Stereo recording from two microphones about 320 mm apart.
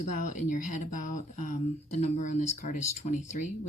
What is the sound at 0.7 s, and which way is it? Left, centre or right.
Speech, left.